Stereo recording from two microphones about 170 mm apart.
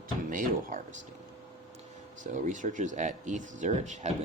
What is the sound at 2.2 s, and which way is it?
Speech, 50° right (ahead or behind).